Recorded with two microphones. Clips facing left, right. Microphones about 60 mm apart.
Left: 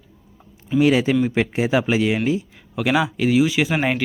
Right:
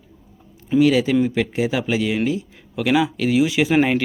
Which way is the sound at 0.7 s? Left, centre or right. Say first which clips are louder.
Right 1 dB; left.